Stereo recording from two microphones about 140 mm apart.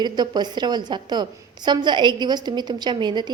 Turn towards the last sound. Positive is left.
turn(degrees=-30)  # may be behind; listen again after turning